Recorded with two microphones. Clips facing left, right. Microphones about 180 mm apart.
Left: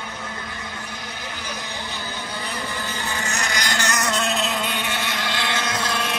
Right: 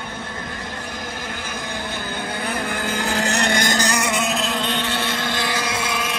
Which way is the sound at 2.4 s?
75° right (ahead or behind).